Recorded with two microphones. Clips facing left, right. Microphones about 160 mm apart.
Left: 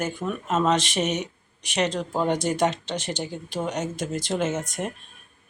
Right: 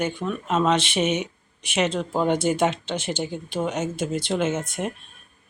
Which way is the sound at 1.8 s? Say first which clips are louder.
Right 2 dB; 5° right (ahead or behind).